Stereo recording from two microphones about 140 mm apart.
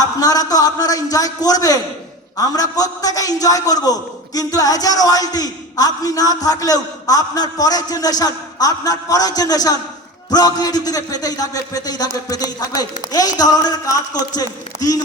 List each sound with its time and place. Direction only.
0.0 s a man's voice: 25° left (ahead or behind)